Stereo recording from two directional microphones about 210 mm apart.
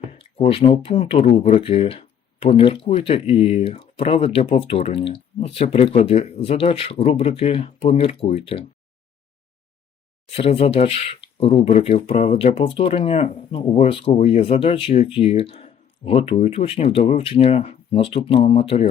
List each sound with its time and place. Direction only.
0.1 s speech: 25° left (ahead or behind)
10.2 s speech: 30° left (ahead or behind)